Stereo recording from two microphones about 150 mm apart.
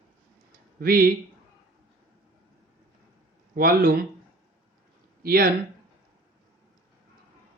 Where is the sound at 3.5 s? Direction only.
75° right (ahead or behind).